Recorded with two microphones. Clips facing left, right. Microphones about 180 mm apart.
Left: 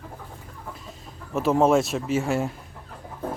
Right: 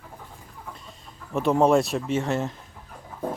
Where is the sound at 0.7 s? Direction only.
Centre (ahead or behind).